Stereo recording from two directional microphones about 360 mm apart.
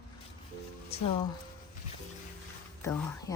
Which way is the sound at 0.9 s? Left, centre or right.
Centre.